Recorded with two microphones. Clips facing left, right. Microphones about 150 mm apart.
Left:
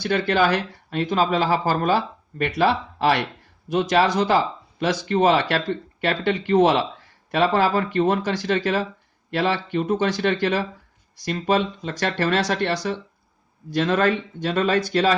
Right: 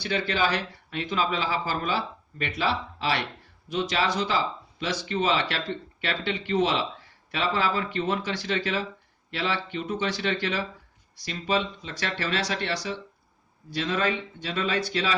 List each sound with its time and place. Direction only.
0.0 s speech: 55° left (ahead or behind)